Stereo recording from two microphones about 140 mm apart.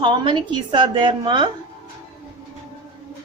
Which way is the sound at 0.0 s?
35° right (ahead or behind).